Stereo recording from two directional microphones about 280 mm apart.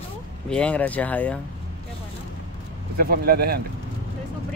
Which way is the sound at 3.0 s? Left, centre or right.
Right.